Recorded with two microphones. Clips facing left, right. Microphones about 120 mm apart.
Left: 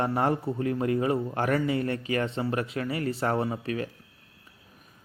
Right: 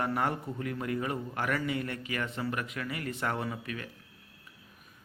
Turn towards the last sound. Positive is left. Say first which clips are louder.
# left 7 dB
turn(degrees=35)  # may be behind; listen again after turning